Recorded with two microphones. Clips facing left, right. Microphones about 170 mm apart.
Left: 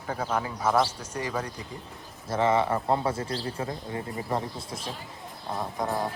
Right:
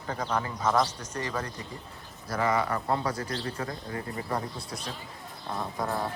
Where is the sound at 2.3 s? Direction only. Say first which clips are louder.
Left 3 dB; 25° left (ahead or behind).